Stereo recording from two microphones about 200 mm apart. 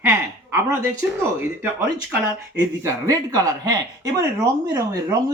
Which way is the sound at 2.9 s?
15° right (ahead or behind).